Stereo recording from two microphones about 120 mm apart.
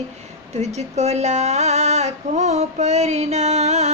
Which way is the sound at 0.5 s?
65° right (ahead or behind).